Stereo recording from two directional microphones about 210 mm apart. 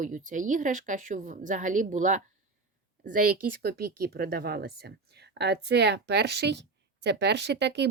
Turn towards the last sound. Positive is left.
turn(degrees=-55)  # may be behind; listen again after turning